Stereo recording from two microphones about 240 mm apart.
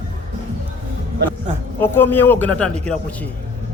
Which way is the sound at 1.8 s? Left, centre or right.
Centre.